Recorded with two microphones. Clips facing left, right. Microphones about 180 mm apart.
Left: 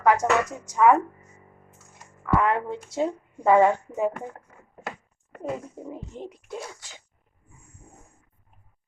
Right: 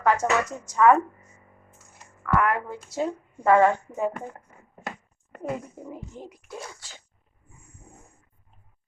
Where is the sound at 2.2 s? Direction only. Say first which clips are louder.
Left 1 dB; 20° left (ahead or behind).